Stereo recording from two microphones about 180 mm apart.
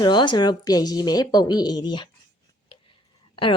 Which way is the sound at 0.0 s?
25° left (ahead or behind).